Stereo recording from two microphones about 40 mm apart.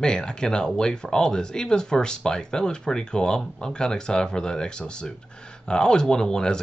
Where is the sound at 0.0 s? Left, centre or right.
Left.